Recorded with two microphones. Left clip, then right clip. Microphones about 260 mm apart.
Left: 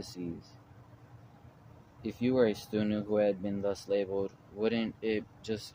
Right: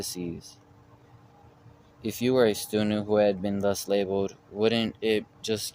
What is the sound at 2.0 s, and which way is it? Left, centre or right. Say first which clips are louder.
Speech: right 5 dB; right.